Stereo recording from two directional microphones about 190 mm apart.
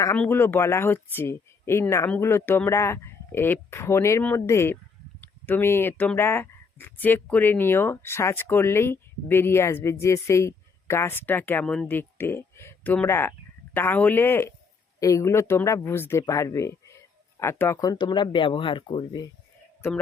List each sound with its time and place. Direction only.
0.0 s speech: 10° left (ahead or behind)
19.8 s speech: 10° left (ahead or behind)